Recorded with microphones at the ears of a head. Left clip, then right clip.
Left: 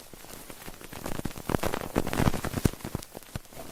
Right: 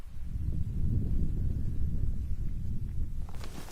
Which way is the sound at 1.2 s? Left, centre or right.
Left.